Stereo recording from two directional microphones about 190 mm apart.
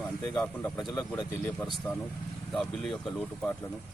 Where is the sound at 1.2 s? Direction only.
25° left (ahead or behind).